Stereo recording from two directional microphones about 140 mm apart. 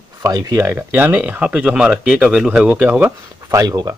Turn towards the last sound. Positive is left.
turn(degrees=-25)  # may be behind; listen again after turning